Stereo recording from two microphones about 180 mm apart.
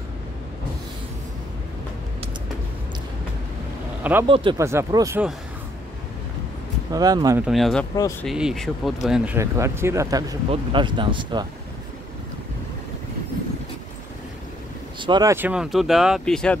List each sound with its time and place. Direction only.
4.0 s speech: 10° right (ahead or behind)
4.3 s speech: 30° right (ahead or behind)
4.6 s speech: 15° right (ahead or behind)
6.9 s speech: 20° right (ahead or behind)
7.3 s speech: centre (ahead or behind); by 11.4 s 25° right (ahead or behind)
15.0 s speech: 25° right (ahead or behind)
15.3 s speech: 5° right (ahead or behind)